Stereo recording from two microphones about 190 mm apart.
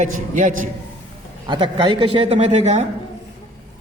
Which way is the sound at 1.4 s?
25° right (ahead or behind).